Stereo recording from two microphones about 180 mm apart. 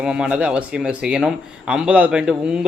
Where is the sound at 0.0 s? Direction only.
5° right (ahead or behind).